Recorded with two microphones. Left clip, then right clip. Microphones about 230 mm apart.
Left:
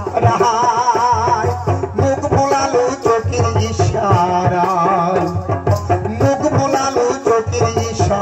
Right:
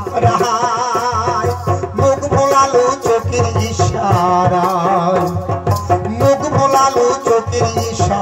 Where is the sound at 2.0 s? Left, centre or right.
Right.